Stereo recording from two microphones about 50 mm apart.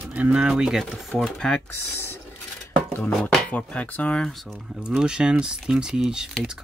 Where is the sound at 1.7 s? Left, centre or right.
Left.